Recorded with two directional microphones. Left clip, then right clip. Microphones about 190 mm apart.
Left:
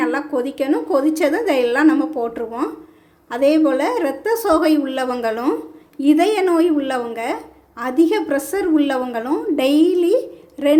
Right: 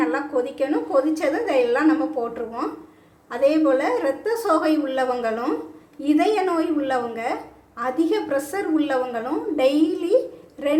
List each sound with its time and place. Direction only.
0.0 s a woman's voice: 40° left (ahead or behind)